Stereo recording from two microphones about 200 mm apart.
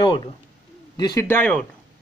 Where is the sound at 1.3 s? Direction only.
5° left (ahead or behind).